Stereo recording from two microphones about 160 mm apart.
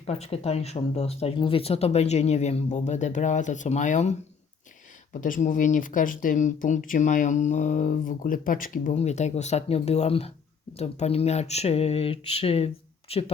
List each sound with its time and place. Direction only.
0.0 s speech: 40° left (ahead or behind)
5.2 s speech: 55° left (ahead or behind)
9.0 s speech: 45° left (ahead or behind)